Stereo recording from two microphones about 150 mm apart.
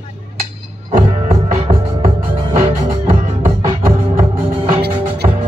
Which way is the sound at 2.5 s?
60° right (ahead or behind).